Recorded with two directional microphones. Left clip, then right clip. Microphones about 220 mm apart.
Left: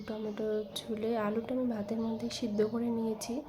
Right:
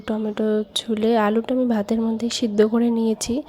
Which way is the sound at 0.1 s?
40° right (ahead or behind).